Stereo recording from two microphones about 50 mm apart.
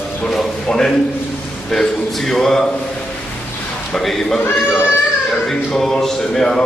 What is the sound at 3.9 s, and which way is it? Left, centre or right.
Speech, centre.